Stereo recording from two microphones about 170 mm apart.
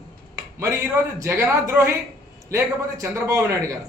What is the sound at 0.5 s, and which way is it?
A man's voice, 15° right (ahead or behind).